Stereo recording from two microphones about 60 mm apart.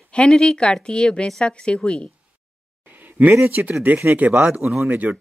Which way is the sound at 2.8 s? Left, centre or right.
Right.